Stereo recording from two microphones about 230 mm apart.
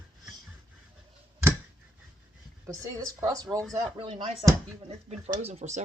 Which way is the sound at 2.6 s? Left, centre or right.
Centre.